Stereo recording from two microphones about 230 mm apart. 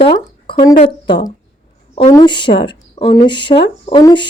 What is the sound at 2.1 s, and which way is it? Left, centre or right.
Speech, centre.